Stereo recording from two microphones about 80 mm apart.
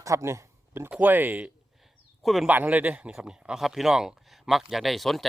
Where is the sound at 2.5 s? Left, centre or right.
Right.